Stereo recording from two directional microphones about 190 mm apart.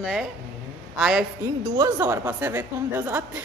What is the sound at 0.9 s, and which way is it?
A woman's voice, centre (ahead or behind).